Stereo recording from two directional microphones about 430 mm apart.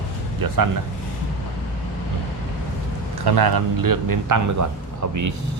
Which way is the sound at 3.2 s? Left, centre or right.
Right.